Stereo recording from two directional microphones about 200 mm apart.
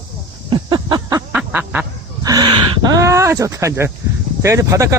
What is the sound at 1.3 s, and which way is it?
Duck, 10° right (ahead or behind).